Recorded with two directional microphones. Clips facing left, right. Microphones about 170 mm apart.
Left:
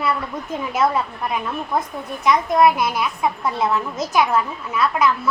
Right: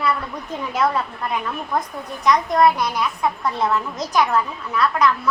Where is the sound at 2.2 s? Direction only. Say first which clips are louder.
Left 1 dB; 5° left (ahead or behind).